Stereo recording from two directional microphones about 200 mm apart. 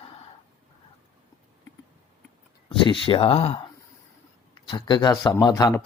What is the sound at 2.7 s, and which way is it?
Speech, 25° left (ahead or behind).